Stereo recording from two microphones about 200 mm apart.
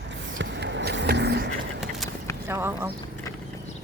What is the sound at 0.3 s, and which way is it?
Vehicle, 65° right (ahead or behind).